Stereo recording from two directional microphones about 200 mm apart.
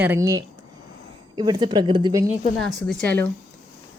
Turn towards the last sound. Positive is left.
turn(degrees=5)  # may be behind; listen again after turning